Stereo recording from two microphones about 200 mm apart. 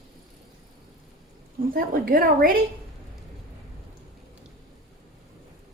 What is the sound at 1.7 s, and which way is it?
Speech, 45° right (ahead or behind).